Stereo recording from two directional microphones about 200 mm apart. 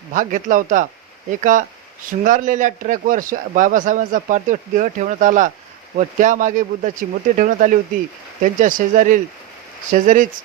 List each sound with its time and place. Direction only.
0.1 s a man's voice: 40° right (ahead or behind)